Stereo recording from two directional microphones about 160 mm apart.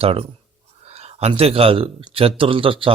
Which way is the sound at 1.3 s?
35° right (ahead or behind).